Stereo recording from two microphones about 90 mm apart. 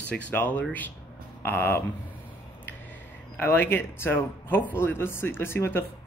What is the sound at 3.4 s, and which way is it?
Speech, 25° left (ahead or behind).